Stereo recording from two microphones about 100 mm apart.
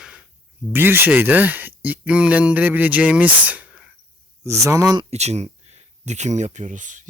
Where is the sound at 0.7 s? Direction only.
20° right (ahead or behind).